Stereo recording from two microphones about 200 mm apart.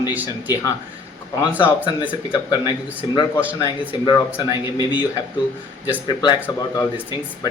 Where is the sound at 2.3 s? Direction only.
20° left (ahead or behind).